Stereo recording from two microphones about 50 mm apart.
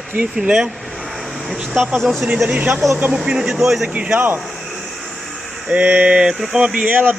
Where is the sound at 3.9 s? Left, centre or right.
Right.